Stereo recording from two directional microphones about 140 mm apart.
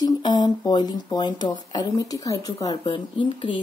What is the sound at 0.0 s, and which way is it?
Speech, 30° left (ahead or behind).